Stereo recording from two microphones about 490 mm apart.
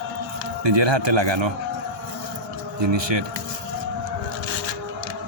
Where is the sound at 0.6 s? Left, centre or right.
Right.